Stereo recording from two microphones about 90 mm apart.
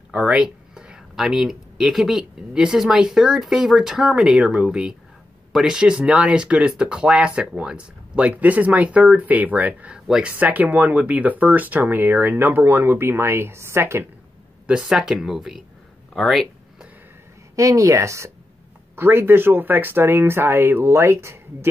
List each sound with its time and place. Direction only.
0.1 s speech: 10° right (ahead or behind)
10.3 s speech: 20° right (ahead or behind)
14.7 s speech: 10° right (ahead or behind)
17.6 s speech: 40° right (ahead or behind)